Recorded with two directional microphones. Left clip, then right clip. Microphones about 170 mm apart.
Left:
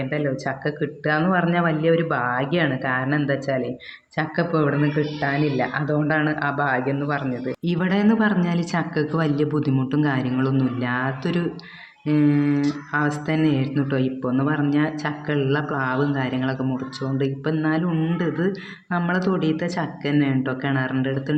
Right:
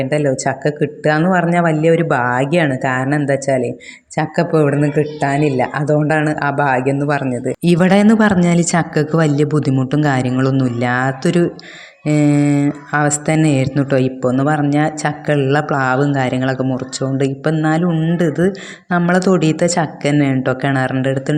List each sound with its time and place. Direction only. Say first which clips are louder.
0.0 s speech: right 9 dB; 50° right (ahead or behind)